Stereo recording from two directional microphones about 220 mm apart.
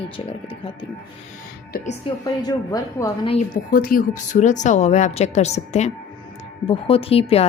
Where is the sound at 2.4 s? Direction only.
15° left (ahead or behind).